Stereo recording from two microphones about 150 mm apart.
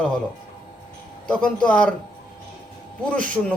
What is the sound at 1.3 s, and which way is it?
Speech, 5° left (ahead or behind).